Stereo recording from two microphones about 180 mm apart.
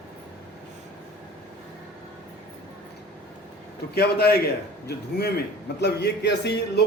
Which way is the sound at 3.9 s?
60° left (ahead or behind).